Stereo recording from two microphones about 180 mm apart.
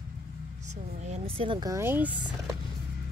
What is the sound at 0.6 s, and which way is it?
Speech, 40° right (ahead or behind).